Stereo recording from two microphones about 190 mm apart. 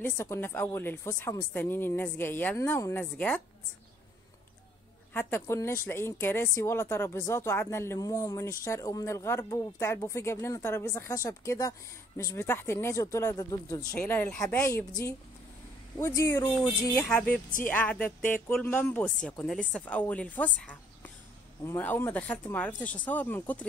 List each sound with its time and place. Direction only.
0.0 s a woman's voice: 10° left (ahead or behind)
5.1 s a woman's voice: 10° left (ahead or behind)
16.0 s a woman's voice: 15° left (ahead or behind)
16.9 s a woman's voice: 5° left (ahead or behind)